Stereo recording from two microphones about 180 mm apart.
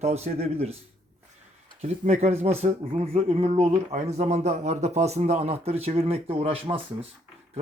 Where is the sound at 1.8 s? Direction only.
40° right (ahead or behind).